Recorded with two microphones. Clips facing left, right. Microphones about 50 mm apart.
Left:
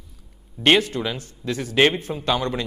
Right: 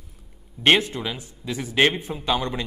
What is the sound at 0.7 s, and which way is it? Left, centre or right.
A man's voice, centre.